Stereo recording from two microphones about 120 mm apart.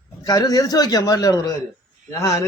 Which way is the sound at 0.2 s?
30° left (ahead or behind).